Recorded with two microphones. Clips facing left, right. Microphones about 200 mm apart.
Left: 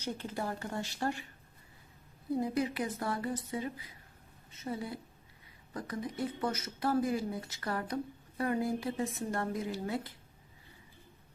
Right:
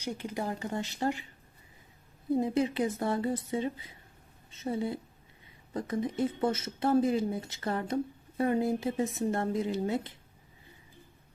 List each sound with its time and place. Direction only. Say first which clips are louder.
0.0 s a woman's voice: right 2 dB; 15° right (ahead or behind)
2.3 s speech: right 4 dB; 25° right (ahead or behind)